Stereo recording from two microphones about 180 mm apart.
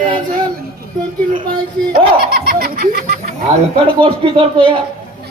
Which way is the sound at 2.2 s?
60° right (ahead or behind).